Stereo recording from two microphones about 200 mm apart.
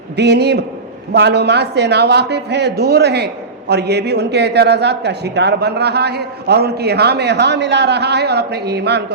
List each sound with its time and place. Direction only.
0.2 s a man's voice: 55° right (ahead or behind)